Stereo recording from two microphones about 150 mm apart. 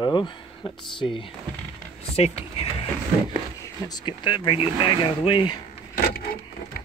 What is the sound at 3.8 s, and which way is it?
Speech, 30° left (ahead or behind).